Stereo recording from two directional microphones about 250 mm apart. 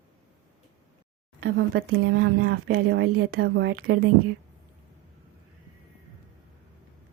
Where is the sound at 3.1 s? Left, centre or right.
Right.